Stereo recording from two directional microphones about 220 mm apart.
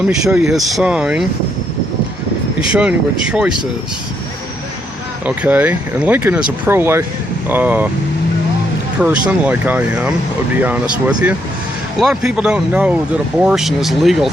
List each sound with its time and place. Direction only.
0.1 s speech: 5° right (ahead or behind)
2.6 s speech: 5° right (ahead or behind)
5.2 s speech: 5° right (ahead or behind)
9.0 s speech: 5° right (ahead or behind)